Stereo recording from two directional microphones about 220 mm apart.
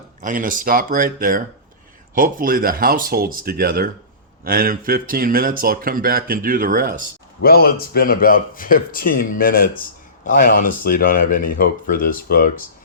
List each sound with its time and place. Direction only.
0.2 s speech: 35° right (ahead or behind)
7.4 s speech: 45° left (ahead or behind)